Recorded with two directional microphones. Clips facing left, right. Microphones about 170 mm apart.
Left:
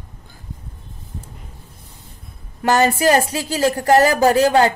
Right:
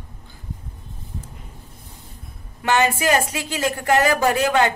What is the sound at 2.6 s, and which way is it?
A woman's voice, 40° left (ahead or behind).